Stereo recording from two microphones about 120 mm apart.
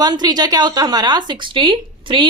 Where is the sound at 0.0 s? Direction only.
35° right (ahead or behind).